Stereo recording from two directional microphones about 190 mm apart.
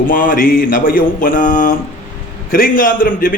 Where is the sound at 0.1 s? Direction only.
45° left (ahead or behind).